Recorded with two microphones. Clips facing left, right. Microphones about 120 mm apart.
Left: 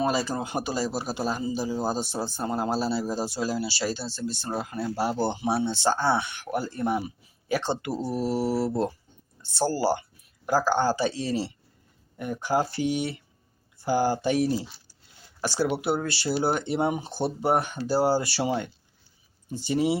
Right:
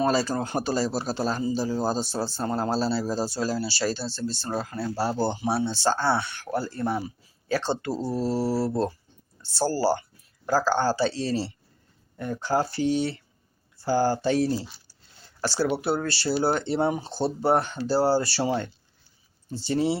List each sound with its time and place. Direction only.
0.0 s speech: 15° left (ahead or behind)